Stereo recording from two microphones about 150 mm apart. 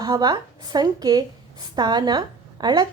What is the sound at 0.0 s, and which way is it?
A woman's voice, 25° right (ahead or behind).